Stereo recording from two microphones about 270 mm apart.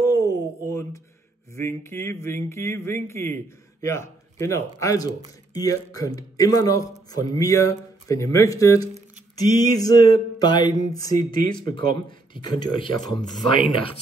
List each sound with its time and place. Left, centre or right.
0.0 s a sound: centre
1.5 s a man's voice: centre
12.4 s a man's voice: centre